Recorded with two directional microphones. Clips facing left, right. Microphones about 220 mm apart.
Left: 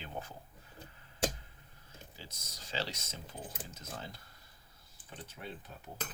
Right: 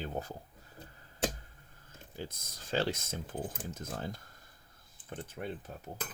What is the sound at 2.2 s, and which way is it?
Speech, 50° right (ahead or behind).